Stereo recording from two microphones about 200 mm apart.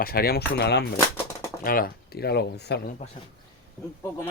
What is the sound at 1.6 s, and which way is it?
Speech, 45° left (ahead or behind).